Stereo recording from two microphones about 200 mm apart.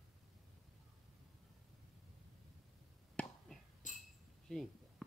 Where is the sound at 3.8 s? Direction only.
40° left (ahead or behind).